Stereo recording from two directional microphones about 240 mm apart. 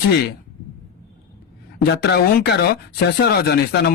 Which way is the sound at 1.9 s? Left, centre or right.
Left.